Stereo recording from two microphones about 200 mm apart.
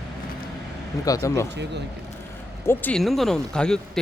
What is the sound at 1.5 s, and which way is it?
Speech, 60° right (ahead or behind).